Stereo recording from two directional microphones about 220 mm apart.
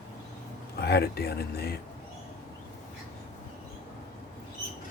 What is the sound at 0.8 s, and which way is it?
Speech, 45° left (ahead or behind).